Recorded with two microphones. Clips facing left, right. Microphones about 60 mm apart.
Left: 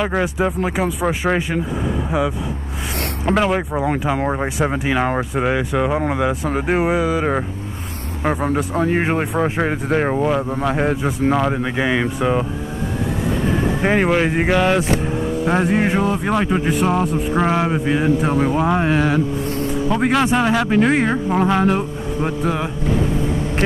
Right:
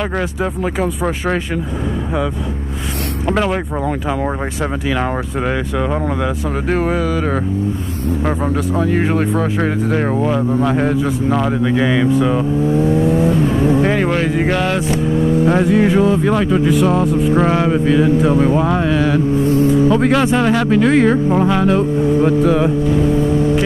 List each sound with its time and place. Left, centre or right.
0.0 s speech: centre
3.3 s speech: centre
4.2 s speech: centre
5.4 s speech: centre
8.7 s speech: left
10.1 s speech: centre
12.6 s vehicle: right
13.8 s speech: centre
15.6 s speech: left
17.3 s speech: centre
17.6 s speech: left
20.3 s speech: centre
20.7 s speech: left